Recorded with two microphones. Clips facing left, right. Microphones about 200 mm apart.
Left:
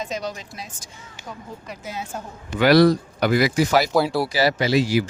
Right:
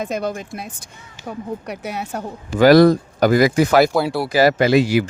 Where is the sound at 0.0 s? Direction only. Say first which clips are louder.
Right 6 dB; 55° right (ahead or behind).